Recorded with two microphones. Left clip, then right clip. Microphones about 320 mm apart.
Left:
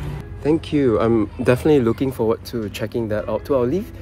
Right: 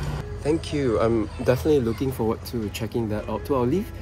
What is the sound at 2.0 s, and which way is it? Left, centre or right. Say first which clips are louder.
Speech: left 6 dB; centre.